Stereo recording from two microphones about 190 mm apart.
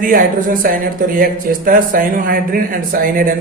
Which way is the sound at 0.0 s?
45° right (ahead or behind).